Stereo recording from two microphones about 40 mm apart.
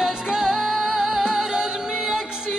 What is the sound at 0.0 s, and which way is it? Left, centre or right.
Music, centre.